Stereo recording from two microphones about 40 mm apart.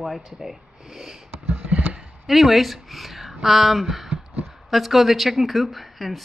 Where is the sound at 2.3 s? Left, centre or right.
Centre.